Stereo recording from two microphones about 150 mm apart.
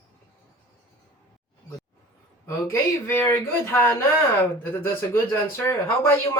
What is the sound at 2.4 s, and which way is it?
Speech, 15° left (ahead or behind).